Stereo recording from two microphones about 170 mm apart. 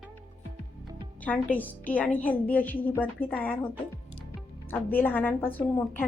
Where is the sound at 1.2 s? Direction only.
10° left (ahead or behind).